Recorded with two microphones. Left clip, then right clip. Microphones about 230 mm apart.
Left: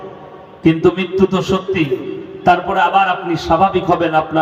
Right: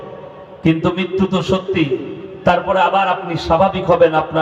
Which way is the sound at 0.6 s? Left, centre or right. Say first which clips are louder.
Left 3 dB; right.